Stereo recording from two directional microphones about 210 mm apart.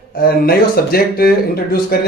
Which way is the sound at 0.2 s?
45° left (ahead or behind).